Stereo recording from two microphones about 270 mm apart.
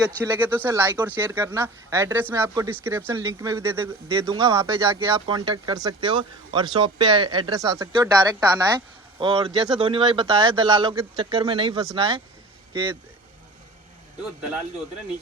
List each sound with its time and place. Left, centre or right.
0.2 s speech: centre